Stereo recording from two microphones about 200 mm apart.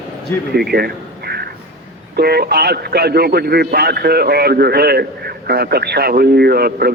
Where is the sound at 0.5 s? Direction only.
50° right (ahead or behind).